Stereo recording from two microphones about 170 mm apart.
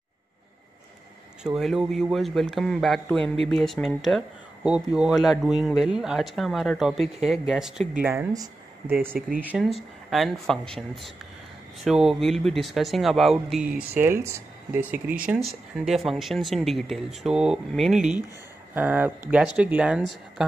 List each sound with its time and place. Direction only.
1.4 s speech: centre (ahead or behind)
8.3 s speech: 20° right (ahead or behind)
9.4 s speech: 5° right (ahead or behind)
13.9 s speech: 15° right (ahead or behind)